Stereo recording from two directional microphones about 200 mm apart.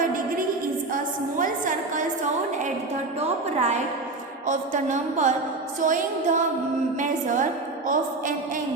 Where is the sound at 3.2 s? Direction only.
35° right (ahead or behind).